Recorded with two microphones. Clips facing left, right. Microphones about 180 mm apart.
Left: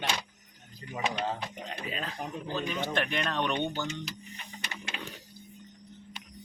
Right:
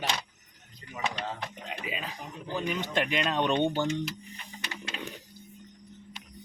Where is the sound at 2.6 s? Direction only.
15° right (ahead or behind).